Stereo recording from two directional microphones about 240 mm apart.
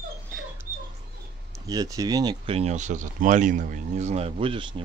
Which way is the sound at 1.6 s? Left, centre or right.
Centre.